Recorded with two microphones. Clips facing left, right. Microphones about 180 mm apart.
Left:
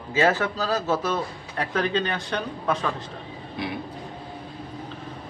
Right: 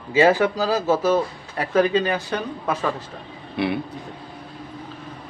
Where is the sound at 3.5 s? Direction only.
65° right (ahead or behind).